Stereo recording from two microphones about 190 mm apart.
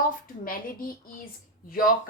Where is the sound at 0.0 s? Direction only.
50° left (ahead or behind).